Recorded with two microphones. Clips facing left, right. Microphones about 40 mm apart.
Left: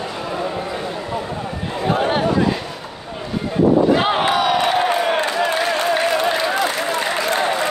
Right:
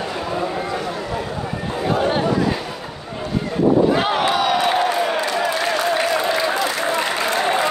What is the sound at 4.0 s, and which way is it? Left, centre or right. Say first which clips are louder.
Slam: left 1 dB; left.